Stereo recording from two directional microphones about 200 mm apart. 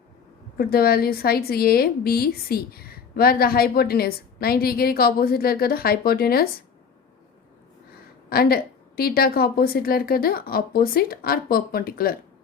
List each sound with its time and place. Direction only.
0.5 s a woman's voice: 50° left (ahead or behind)
8.3 s a woman's voice: 50° left (ahead or behind)